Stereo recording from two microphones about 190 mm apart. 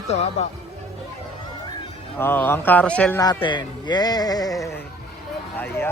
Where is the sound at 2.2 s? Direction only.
10° left (ahead or behind).